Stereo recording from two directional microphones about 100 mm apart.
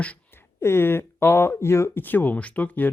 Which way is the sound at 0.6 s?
25° left (ahead or behind).